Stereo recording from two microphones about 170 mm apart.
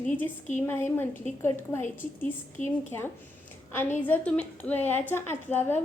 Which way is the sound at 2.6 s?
45° left (ahead or behind).